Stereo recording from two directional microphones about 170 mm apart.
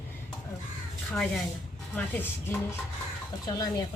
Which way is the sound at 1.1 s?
5° left (ahead or behind).